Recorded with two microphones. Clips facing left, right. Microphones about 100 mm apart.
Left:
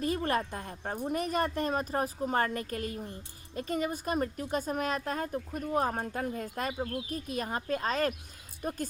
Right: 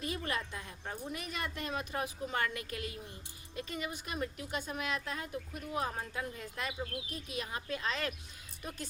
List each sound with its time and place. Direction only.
0.0 s a woman's voice: 40° left (ahead or behind)